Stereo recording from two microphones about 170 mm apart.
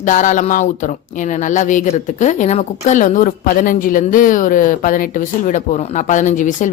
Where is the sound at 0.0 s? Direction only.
45° left (ahead or behind).